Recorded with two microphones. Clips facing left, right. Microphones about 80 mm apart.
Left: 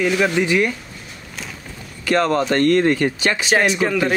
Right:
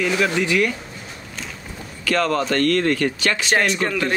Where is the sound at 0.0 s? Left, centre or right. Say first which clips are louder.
Left 2 dB; centre.